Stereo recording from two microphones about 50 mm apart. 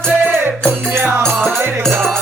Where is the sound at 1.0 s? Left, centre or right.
Right.